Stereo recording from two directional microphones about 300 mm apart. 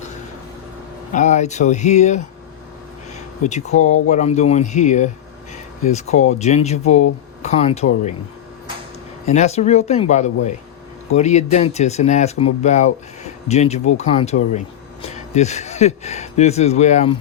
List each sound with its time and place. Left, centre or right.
1.1 s speech: left
3.4 s speech: left
9.2 s speech: left